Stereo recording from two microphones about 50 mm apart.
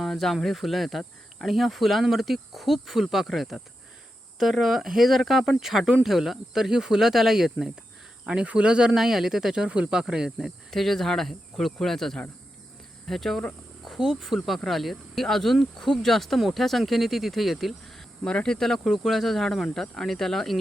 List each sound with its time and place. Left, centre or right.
0.0 s speech: centre
8.3 s speech: right
9.0 s speech: centre
10.7 s speech: centre
18.2 s speech: centre